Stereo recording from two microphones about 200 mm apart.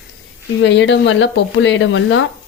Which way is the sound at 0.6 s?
70° left (ahead or behind).